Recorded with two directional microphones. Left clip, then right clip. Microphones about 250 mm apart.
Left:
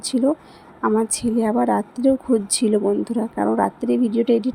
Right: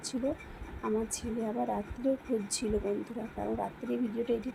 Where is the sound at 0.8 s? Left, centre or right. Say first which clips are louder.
Left 14 dB; left.